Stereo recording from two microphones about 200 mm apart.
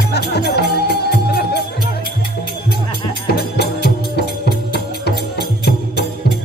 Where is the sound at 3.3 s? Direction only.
55° left (ahead or behind).